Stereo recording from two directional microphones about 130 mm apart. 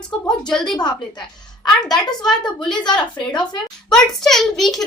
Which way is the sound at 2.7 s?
35° left (ahead or behind).